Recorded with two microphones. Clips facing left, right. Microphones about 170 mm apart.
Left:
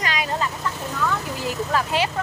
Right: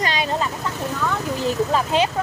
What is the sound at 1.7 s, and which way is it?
Speech, 20° right (ahead or behind).